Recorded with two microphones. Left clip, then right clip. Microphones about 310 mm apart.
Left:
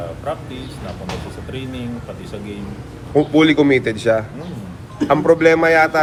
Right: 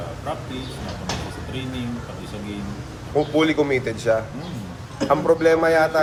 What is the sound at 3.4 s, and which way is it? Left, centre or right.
A man's voice, left.